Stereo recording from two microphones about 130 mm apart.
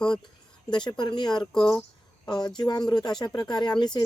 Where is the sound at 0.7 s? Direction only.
35° left (ahead or behind).